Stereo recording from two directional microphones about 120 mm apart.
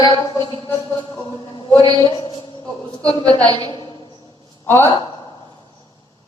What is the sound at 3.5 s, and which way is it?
Speech, 50° left (ahead or behind).